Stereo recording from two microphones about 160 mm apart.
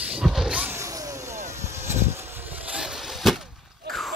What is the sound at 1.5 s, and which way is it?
Vehicle, 15° right (ahead or behind).